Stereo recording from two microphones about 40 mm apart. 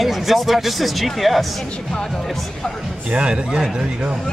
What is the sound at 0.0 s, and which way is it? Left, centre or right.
Speech, centre.